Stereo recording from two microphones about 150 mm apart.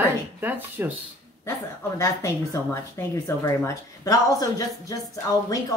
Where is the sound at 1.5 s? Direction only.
20° left (ahead or behind).